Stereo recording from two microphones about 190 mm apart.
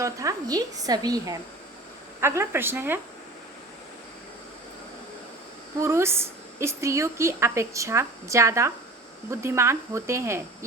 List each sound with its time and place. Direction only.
0.0 s a woman's voice: 15° right (ahead or behind)
5.8 s a woman's voice: 15° right (ahead or behind)